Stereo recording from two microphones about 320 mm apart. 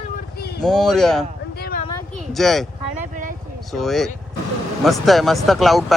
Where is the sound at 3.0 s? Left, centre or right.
Right.